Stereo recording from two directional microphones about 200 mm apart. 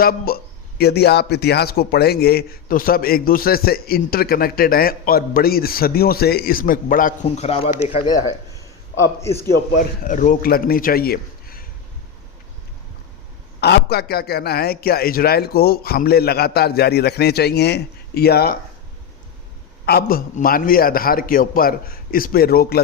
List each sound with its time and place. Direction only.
0.0 s a man's voice: 45° left (ahead or behind)
7.3 s a man's voice: 30° left (ahead or behind)
9.7 s a man's voice: 40° left (ahead or behind)
13.6 s a man's voice: 55° left (ahead or behind)
19.8 s a man's voice: 50° left (ahead or behind)